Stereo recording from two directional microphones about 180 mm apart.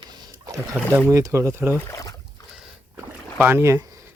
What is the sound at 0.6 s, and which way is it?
Speech, 10° right (ahead or behind).